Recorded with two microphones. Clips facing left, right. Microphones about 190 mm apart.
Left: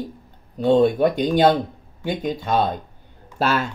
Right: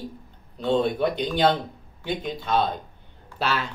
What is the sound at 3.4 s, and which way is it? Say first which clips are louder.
Speech: left 5 dB; 45° left (ahead or behind).